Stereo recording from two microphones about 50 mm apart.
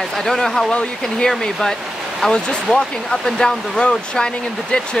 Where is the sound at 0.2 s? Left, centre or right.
Centre.